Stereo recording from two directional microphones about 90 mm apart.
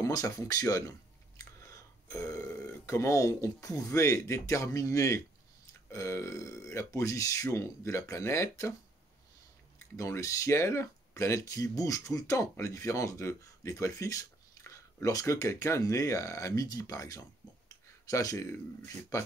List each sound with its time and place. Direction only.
0.0 s speech: 40° left (ahead or behind)
9.9 s speech: 35° left (ahead or behind)